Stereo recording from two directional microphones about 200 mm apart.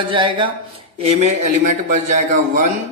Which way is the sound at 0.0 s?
25° right (ahead or behind).